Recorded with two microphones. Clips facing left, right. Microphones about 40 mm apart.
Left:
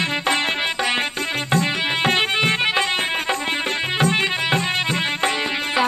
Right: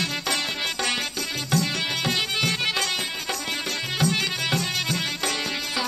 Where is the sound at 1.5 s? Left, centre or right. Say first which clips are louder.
Left 4 dB; left.